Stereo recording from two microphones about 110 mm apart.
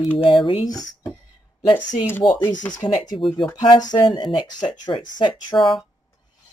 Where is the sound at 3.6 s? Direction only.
40° left (ahead or behind).